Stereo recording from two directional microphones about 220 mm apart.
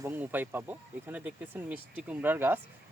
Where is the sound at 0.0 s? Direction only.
10° right (ahead or behind).